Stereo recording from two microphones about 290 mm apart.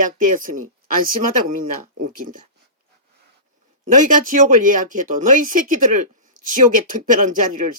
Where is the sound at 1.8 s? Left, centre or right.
Right.